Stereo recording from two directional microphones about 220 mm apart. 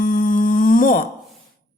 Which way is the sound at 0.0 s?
40° left (ahead or behind).